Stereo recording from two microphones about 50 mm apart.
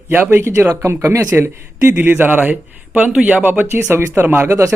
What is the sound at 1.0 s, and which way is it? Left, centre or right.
Speech, right.